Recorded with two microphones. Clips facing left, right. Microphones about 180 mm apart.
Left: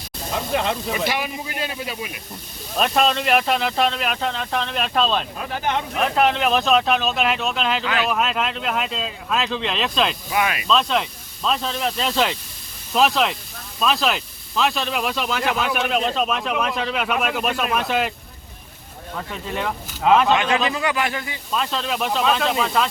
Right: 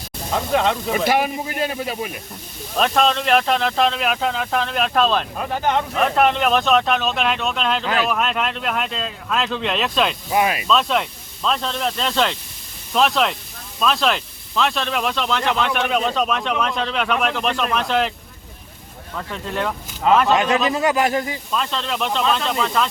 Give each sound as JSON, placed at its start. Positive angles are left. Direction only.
{"t": 0.9, "sound": "speech", "side_deg": -45}
{"t": 2.7, "sound": "speech", "side_deg": 5}
{"t": 10.3, "sound": "speech", "side_deg": -30}
{"t": 10.7, "sound": "speech", "side_deg": 0}
{"t": 19.3, "sound": "speech", "side_deg": 10}
{"t": 20.3, "sound": "speech", "side_deg": -40}
{"t": 21.5, "sound": "speech", "side_deg": 5}